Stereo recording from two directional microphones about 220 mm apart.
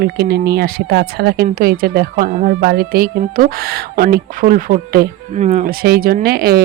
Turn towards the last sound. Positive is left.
turn(degrees=-45)  # may be behind; listen again after turning